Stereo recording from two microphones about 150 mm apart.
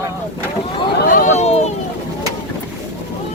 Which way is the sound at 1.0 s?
65° left (ahead or behind).